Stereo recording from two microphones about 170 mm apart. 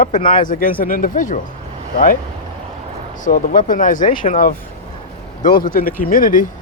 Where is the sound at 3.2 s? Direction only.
55° left (ahead or behind).